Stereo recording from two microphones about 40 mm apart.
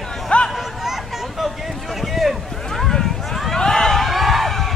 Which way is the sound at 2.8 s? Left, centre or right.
Centre.